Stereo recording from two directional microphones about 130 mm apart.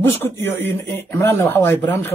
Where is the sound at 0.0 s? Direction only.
15° left (ahead or behind).